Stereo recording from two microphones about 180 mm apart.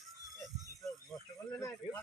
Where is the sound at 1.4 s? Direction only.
20° left (ahead or behind).